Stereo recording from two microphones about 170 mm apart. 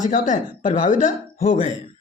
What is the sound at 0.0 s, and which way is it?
Speech, 50° left (ahead or behind).